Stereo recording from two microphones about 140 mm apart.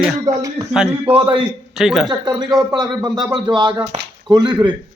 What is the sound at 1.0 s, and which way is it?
Speech, 35° right (ahead or behind).